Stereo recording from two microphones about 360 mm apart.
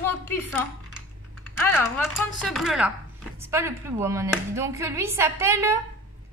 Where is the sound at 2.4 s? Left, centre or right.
Centre.